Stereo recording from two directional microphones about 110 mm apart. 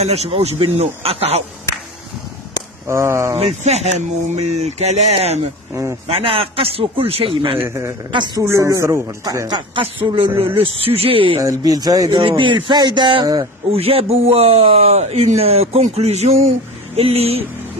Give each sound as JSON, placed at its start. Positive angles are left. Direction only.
{"t": 0.0, "sound": "speech", "side_deg": -75}
{"t": 2.9, "sound": "speech", "side_deg": -25}
{"t": 3.3, "sound": "speech", "side_deg": -80}
{"t": 6.0, "sound": "a man's voice", "side_deg": -65}
{"t": 8.4, "sound": "speech", "side_deg": -30}
{"t": 10.4, "sound": "a man's voice", "side_deg": -60}
{"t": 11.4, "sound": "speech", "side_deg": -35}
{"t": 12.2, "sound": "speech", "side_deg": -55}
{"t": 13.7, "sound": "a man's voice", "side_deg": -65}